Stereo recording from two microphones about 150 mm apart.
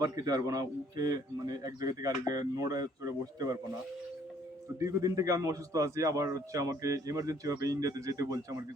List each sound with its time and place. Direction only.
0.0 s a man's voice: 25° right (ahead or behind)
4.8 s a man's voice: 20° right (ahead or behind)